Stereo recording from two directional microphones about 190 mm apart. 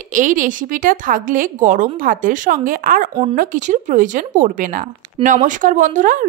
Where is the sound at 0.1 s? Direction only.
40° right (ahead or behind).